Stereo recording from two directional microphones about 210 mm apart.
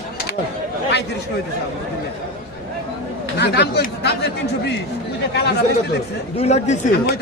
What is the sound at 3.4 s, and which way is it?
Speech, 50° left (ahead or behind).